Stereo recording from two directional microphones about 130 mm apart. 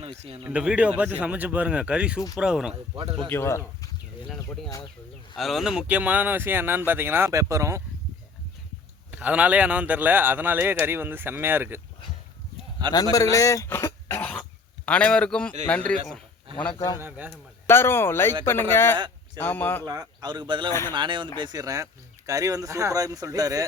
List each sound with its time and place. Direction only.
0.2 s speech: 50° right (ahead or behind)
0.4 s speech: 10° right (ahead or behind)
2.9 s speech: 45° right (ahead or behind)
3.2 s speech: 20° left (ahead or behind)
5.4 s speech: centre (ahead or behind); by 7.8 s 25° right (ahead or behind)
9.1 s speech: 10° right (ahead or behind)
12.9 s speech: 30° left (ahead or behind); by 16.0 s 10° left (ahead or behind)
16.7 s speech: 30° left (ahead or behind)
17.0 s speech: 15° right (ahead or behind)
17.7 s speech: 20° left (ahead or behind)
18.9 s a sound: 35° right (ahead or behind)
19.4 s speech: 15° left (ahead or behind)
19.8 s speech: 30° right (ahead or behind)